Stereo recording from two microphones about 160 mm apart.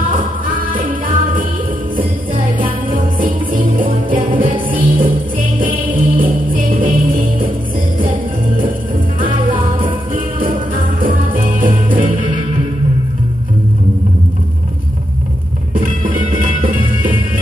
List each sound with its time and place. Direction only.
0.0 s music: 60° right (ahead or behind)
9.2 s music: 60° right (ahead or behind)
15.7 s music: 60° right (ahead or behind)